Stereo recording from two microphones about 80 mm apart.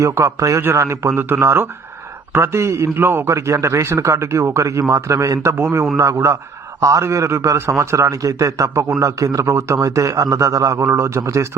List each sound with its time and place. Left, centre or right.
0.0 s a man's voice: right
5.5 s a man's voice: right
6.0 s a man's voice: right